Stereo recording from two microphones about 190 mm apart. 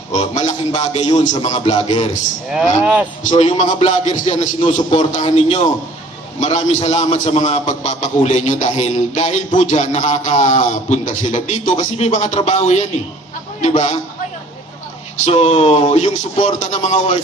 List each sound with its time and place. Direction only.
0.1 s a man's voice: 40° left (ahead or behind)
1.8 s a man's voice: 25° left (ahead or behind)
2.8 s speech: 10° right (ahead or behind)
3.3 s a man's voice: 40° left (ahead or behind)
15.2 s a man's voice: 30° left (ahead or behind)